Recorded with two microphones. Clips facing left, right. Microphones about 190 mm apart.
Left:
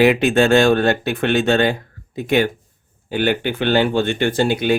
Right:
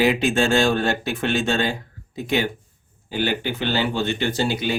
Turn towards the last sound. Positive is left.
turn(degrees=55)  # may be behind; listen again after turning